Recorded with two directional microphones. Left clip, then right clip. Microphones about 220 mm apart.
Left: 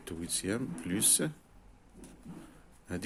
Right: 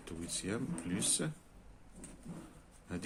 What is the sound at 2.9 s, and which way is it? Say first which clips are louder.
Speech: left 4 dB; 35° left (ahead or behind).